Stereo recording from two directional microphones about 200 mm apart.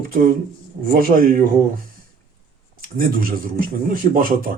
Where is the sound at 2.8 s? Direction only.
45° right (ahead or behind).